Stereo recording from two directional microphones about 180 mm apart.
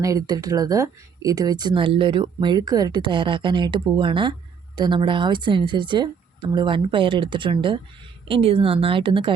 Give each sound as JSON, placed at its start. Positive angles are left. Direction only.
{"t": 0.0, "sound": "speech", "side_deg": -20}